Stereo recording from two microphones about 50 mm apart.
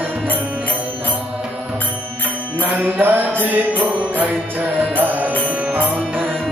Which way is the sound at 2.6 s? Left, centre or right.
Right.